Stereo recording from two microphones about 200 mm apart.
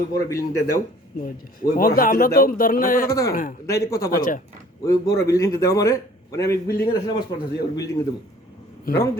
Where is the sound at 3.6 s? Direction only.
15° left (ahead or behind).